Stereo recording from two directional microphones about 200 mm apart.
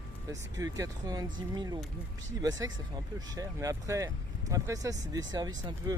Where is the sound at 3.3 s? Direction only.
15° right (ahead or behind).